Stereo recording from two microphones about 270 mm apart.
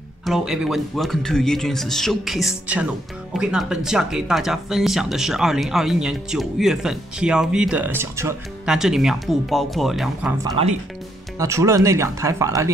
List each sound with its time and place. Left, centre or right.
0.2 s speech: centre
10.4 s speech: right
11.3 s speech: centre